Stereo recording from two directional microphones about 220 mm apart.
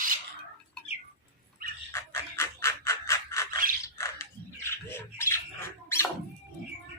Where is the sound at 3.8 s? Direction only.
15° left (ahead or behind).